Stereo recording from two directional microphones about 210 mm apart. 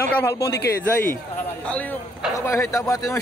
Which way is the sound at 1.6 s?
5° left (ahead or behind).